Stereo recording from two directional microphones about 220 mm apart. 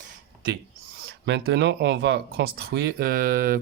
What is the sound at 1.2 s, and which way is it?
Speech, 50° right (ahead or behind).